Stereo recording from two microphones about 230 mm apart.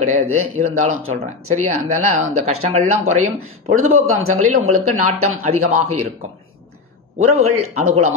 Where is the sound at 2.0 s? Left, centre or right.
Right.